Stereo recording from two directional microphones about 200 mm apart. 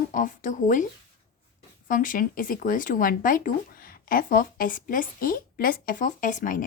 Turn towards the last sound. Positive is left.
turn(degrees=40)  # may be behind; listen again after turning